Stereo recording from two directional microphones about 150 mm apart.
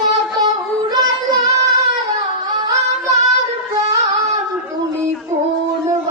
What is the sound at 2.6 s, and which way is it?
Music, 20° right (ahead or behind).